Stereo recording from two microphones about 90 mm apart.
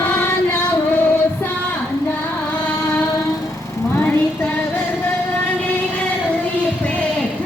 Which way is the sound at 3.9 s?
20° left (ahead or behind).